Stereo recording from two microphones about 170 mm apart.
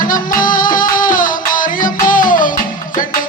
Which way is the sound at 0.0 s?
55° left (ahead or behind).